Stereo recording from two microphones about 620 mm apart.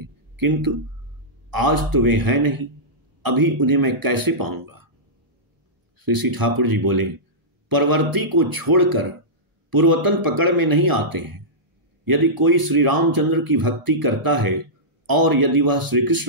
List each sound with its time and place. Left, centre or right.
0.0 s a sound: right
1.5 s speech: right
5.9 s a man's voice: right